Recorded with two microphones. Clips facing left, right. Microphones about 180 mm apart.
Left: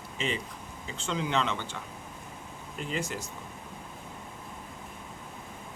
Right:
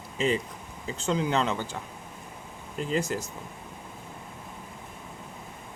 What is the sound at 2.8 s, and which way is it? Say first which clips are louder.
Speech: right 6 dB; 35° right (ahead or behind).